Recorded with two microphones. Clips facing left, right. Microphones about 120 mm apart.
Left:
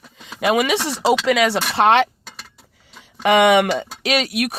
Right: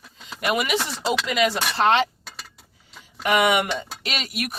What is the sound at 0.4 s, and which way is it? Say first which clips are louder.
Speech: left 6 dB; 90° left.